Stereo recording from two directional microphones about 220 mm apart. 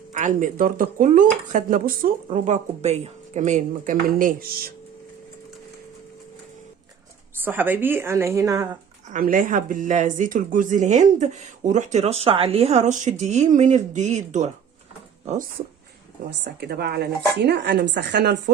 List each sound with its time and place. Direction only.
0.1 s speech: 35° right (ahead or behind)
7.4 s a woman's voice: 10° right (ahead or behind)
9.1 s speech: 40° right (ahead or behind)
16.4 s a woman's voice: 50° right (ahead or behind)